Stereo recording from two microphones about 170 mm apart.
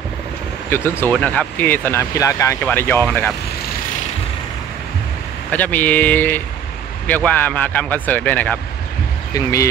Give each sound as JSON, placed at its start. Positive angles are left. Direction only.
{"t": 0.7, "sound": "speech", "side_deg": 15}
{"t": 5.5, "sound": "speech", "side_deg": 10}